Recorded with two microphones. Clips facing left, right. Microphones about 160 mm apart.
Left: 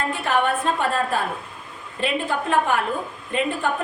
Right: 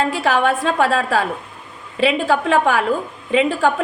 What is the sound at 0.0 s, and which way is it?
A woman's voice, 90° right.